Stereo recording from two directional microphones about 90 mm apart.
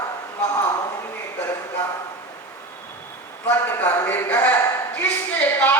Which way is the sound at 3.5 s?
20° left (ahead or behind).